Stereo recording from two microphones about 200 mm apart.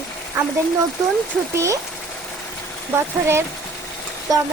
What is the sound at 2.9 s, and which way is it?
Speech, 10° right (ahead or behind).